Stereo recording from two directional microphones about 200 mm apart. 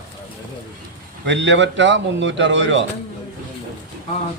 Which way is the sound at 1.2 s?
65° right (ahead or behind).